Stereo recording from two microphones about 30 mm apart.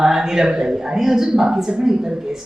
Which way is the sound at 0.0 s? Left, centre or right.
Centre.